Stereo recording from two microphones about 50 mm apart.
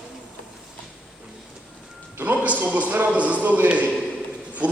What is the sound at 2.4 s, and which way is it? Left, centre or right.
A man's voice, right.